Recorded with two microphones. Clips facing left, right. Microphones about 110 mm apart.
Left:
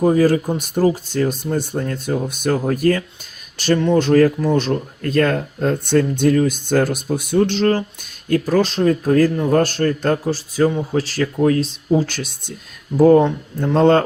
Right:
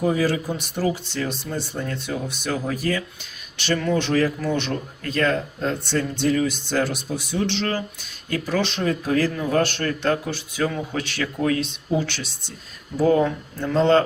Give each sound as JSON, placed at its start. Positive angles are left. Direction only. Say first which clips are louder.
{"t": 0.0, "sound": "speech", "louder": "left 7 dB", "side_deg": 45}
{"t": 13.7, "sound": "speech", "louder": "left 4 dB", "side_deg": 50}